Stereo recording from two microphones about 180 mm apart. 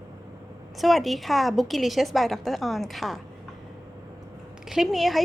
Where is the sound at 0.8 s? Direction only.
Centre (ahead or behind).